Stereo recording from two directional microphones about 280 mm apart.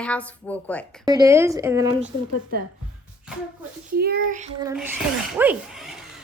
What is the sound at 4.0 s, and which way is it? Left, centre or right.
Speech, right.